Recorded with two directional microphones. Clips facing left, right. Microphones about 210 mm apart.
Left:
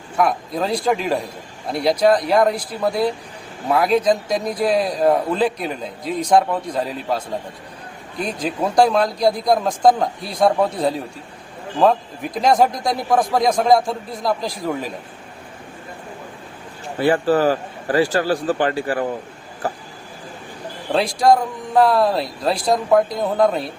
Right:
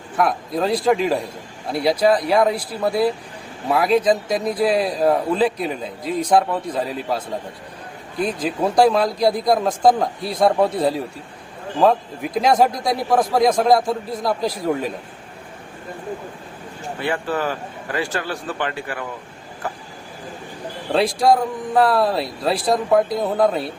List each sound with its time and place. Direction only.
0.2 s a man's voice: centre (ahead or behind)
8.2 s a man's voice: 5° right (ahead or behind)
17.0 s speech: 35° left (ahead or behind)
20.9 s a man's voice: 5° right (ahead or behind)